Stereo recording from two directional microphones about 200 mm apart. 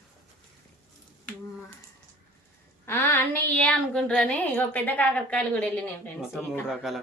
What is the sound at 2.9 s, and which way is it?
A woman's voice, 10° left (ahead or behind).